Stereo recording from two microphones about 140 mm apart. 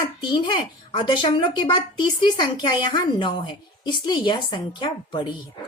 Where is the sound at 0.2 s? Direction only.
35° left (ahead or behind).